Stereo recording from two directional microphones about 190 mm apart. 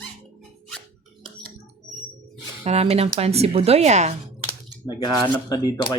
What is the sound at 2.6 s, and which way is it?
Speech, 35° right (ahead or behind).